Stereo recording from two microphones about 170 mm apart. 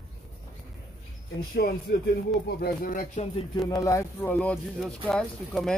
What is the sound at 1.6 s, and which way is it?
Speech, 70° left (ahead or behind).